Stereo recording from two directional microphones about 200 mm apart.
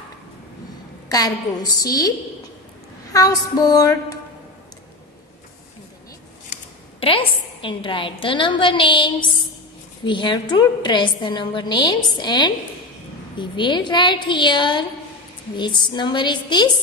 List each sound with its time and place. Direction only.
1.0 s a woman's voice: 20° left (ahead or behind)
6.5 s a woman's voice: 30° left (ahead or behind)